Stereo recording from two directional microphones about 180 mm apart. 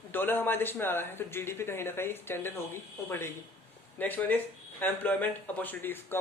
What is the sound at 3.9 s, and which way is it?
Speech, 10° left (ahead or behind).